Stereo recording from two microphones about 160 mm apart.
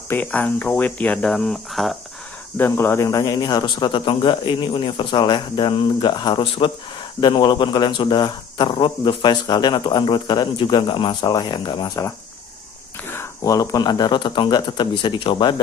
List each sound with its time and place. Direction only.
0.1 s speech: 10° left (ahead or behind)
2.5 s speech: 15° left (ahead or behind)
13.1 s speech: 15° left (ahead or behind)